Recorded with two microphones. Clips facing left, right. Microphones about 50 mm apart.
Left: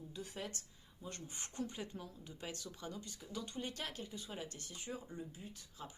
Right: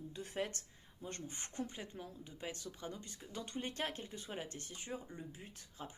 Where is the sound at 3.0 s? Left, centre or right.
Right.